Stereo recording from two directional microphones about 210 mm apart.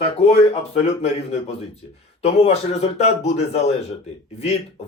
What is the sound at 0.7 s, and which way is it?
Speech, 30° left (ahead or behind).